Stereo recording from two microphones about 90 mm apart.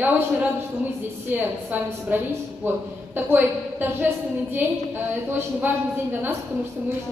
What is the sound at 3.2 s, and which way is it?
A woman's voice, 25° right (ahead or behind).